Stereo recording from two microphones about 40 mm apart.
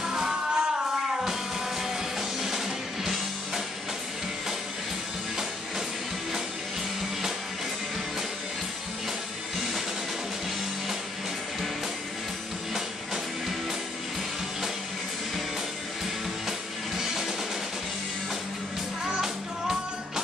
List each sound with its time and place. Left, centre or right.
0.0 s music: centre
1.8 s music: centre
16.4 s music: centre
19.0 s music: centre